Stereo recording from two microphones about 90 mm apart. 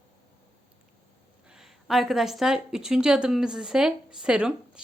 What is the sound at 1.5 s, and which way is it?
Speech, 5° right (ahead or behind).